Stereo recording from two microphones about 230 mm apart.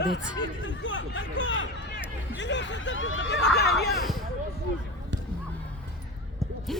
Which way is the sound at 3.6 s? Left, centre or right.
Left.